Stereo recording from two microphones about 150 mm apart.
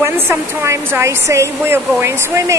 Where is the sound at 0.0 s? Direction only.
15° right (ahead or behind).